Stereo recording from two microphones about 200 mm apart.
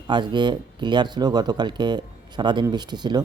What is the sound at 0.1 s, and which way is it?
Speech, 20° right (ahead or behind).